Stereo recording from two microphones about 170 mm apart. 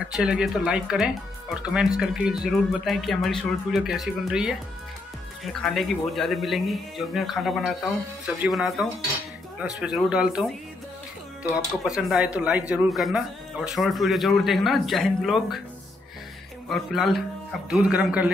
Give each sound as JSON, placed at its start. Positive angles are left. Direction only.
{"t": 0.0, "sound": "speech", "side_deg": -5}
{"t": 11.5, "sound": "speech", "side_deg": -5}
{"t": 16.6, "sound": "speech", "side_deg": 0}